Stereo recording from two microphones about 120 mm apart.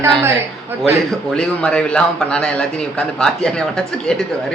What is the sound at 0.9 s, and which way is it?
A man's voice, 5° left (ahead or behind).